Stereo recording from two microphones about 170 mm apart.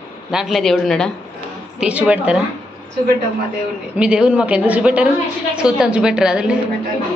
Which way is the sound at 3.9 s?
5° right (ahead or behind).